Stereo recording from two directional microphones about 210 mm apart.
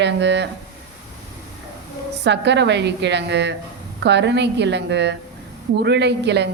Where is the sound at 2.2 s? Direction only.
55° right (ahead or behind).